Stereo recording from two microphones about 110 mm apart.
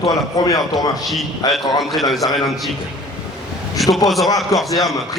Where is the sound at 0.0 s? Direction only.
35° left (ahead or behind).